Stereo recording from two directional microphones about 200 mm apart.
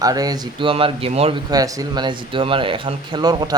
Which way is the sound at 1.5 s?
15° right (ahead or behind).